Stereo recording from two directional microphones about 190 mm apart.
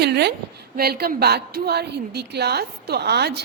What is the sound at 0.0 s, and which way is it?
A woman's voice, 60° right (ahead or behind).